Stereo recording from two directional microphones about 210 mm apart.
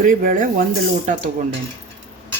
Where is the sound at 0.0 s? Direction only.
40° right (ahead or behind).